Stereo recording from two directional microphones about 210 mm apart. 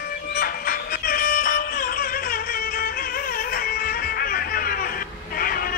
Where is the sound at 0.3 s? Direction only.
45° left (ahead or behind).